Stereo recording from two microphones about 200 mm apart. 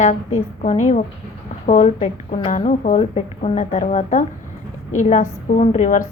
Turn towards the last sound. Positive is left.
turn(degrees=40)  # may be behind; listen again after turning